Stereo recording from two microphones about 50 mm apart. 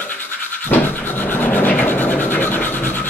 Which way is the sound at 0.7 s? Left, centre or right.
Left.